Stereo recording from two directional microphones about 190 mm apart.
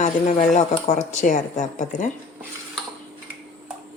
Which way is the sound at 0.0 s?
40° left (ahead or behind).